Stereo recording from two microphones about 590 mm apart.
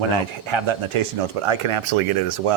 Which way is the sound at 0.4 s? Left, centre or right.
Right.